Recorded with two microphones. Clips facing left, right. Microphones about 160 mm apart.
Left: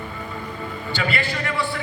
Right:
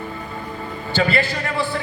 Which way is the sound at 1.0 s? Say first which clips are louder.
Right 5 dB; 35° right (ahead or behind).